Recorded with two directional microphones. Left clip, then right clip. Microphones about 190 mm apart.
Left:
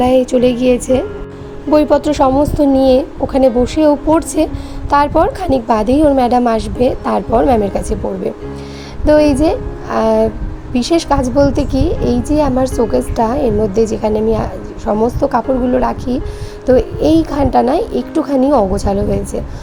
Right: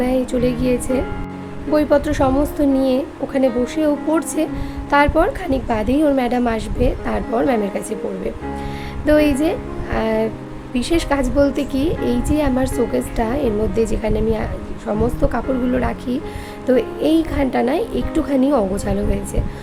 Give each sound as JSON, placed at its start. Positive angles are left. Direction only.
{"t": 0.0, "sound": "a woman's voice", "side_deg": 25}